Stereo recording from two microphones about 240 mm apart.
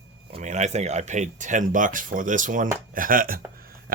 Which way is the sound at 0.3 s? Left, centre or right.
Right.